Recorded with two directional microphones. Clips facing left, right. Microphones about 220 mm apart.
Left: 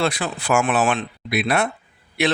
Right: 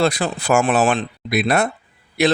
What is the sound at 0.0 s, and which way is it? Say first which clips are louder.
Speech: right 4 dB; 40° right (ahead or behind).